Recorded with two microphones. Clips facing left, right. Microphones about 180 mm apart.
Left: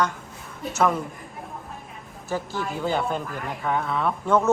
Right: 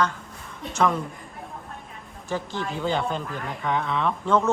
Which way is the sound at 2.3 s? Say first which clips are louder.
Left 1 dB; 5° left (ahead or behind).